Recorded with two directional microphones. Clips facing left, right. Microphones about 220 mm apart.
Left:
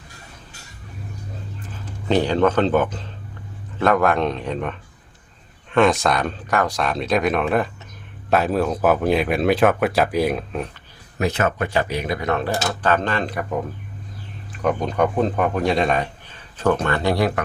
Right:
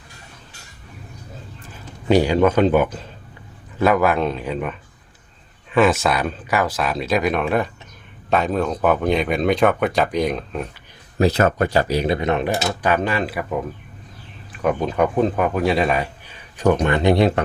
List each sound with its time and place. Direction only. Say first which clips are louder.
2.0 s speech: right 2 dB; 10° right (ahead or behind)
11.2 s speech: right 4 dB; 35° right (ahead or behind); by 13.4 s 5° right (ahead or behind)
14.6 s speech: right 1 dB; 5° right (ahead or behind); by 17.4 s 25° right (ahead or behind)